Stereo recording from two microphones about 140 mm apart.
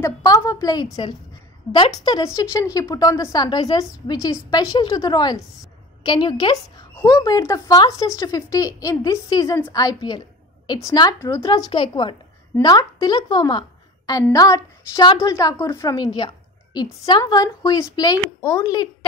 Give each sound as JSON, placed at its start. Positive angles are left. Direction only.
{"t": 0.0, "sound": "a woman's voice", "side_deg": 20}